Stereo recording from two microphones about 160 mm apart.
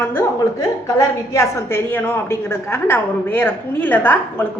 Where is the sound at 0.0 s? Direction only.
15° left (ahead or behind).